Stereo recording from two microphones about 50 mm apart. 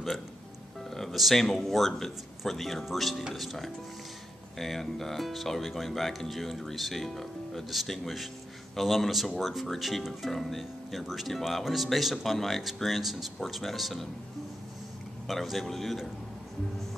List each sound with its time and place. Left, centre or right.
0.8 s speech: centre
15.2 s speech: centre